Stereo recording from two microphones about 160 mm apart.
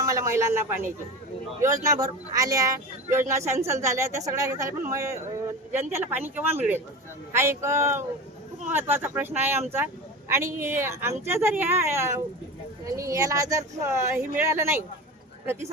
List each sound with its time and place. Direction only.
0.0 s a woman's voice: 20° right (ahead or behind)